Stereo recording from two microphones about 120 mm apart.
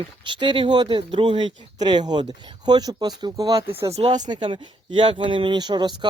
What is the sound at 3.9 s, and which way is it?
Speech, 60° right (ahead or behind).